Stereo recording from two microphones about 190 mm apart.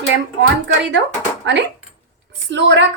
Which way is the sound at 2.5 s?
65° right (ahead or behind).